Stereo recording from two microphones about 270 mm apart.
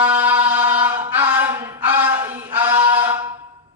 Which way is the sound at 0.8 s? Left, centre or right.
Centre.